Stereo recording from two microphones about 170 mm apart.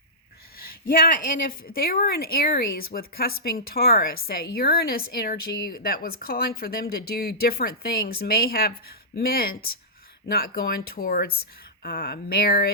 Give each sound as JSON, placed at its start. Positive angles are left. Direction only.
{"t": 0.5, "sound": "a woman's voice", "side_deg": 60}